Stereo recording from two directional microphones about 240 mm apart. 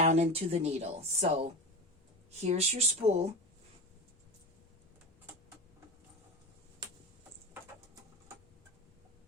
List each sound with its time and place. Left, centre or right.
0.0 s speech: right
2.4 s speech: right